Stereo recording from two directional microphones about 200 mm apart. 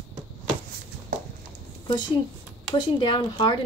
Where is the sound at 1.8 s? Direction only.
20° left (ahead or behind).